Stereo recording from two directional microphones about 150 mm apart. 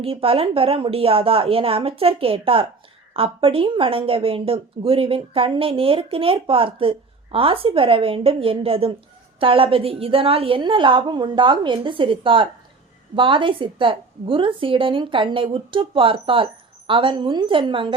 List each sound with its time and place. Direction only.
0.0 s speech: 40° right (ahead or behind)